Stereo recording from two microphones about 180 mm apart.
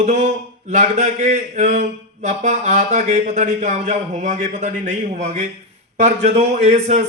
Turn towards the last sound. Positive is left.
turn(degrees=-40)  # may be behind; listen again after turning